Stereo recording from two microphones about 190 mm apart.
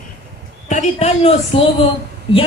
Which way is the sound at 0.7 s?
35° left (ahead or behind).